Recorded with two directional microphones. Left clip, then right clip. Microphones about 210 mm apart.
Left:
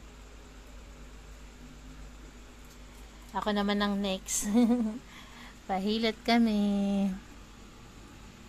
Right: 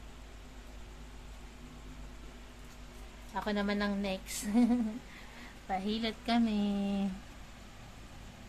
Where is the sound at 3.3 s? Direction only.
25° left (ahead or behind).